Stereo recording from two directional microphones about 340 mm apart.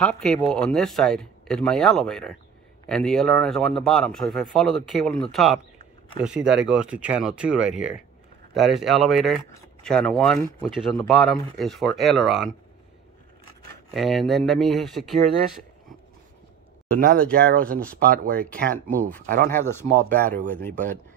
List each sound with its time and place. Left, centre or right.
0.0 s speech: centre
13.9 s speech: centre
16.9 s speech: right
18.4 s speech: centre
19.2 s speech: right
19.5 s speech: centre
20.7 s speech: right